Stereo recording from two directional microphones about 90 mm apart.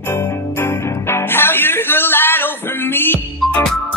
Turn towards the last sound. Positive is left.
turn(degrees=5)  # may be behind; listen again after turning